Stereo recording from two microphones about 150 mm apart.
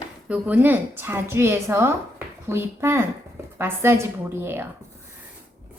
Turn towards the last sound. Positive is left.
turn(degrees=-15)  # may be behind; listen again after turning